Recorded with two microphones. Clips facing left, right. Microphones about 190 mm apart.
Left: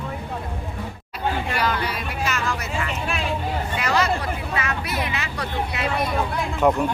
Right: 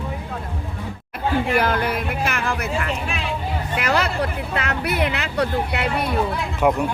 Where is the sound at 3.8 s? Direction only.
60° right (ahead or behind).